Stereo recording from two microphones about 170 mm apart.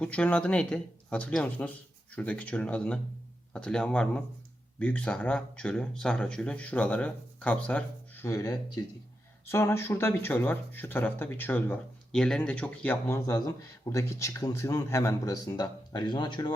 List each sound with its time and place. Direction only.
0.0 s speech: 5° left (ahead or behind); by 16.5 s 25° left (ahead or behind)